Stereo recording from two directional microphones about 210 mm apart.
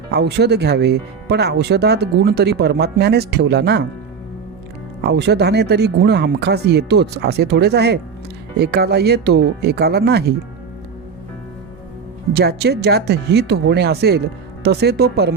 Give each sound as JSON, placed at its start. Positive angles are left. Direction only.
{"t": 0.1, "sound": "speech", "side_deg": -55}
{"t": 5.0, "sound": "speech", "side_deg": -55}
{"t": 12.3, "sound": "speech", "side_deg": -50}